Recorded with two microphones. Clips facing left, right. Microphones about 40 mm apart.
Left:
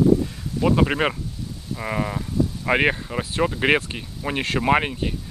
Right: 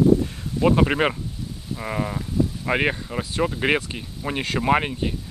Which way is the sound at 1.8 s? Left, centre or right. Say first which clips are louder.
Left 1 dB; centre.